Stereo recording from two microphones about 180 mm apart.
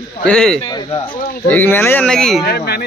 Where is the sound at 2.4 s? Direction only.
60° left (ahead or behind).